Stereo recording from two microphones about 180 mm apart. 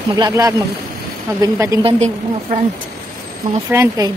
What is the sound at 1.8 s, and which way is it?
Speech, 40° right (ahead or behind).